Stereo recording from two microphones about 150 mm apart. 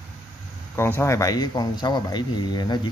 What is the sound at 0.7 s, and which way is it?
Speech, 15° left (ahead or behind).